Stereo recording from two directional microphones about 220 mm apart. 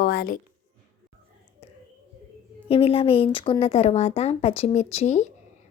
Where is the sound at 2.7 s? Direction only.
25° left (ahead or behind).